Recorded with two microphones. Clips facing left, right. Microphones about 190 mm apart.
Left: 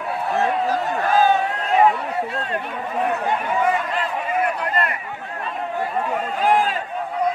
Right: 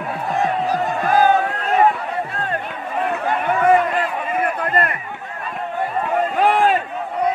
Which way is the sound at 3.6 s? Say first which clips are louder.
Right 6 dB; 55° right (ahead or behind).